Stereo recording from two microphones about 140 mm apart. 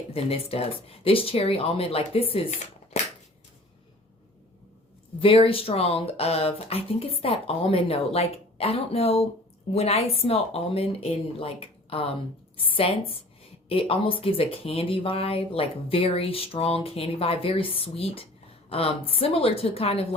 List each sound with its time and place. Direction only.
0.1 s speech: 45° left (ahead or behind)
2.9 s a sound: 55° left (ahead or behind)
5.2 s a woman's voice: 40° left (ahead or behind)